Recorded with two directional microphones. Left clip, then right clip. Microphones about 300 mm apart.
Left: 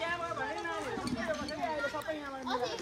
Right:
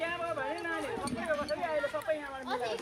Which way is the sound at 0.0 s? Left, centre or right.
Centre.